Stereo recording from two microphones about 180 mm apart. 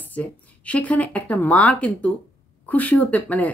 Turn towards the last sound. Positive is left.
turn(degrees=10)  # may be behind; listen again after turning